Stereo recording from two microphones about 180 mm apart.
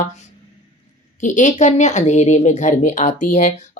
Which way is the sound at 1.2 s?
45° left (ahead or behind).